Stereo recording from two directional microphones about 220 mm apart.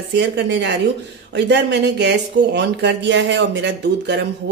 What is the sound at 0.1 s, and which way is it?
Speech, 55° right (ahead or behind).